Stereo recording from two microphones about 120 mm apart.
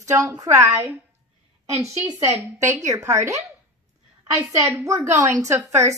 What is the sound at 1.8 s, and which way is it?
A woman's voice, 25° right (ahead or behind).